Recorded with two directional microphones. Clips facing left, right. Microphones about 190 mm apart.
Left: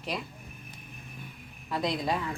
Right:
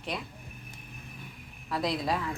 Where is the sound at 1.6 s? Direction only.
Centre (ahead or behind).